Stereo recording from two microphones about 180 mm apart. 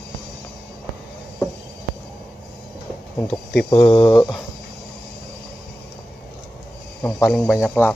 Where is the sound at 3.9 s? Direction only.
25° left (ahead or behind).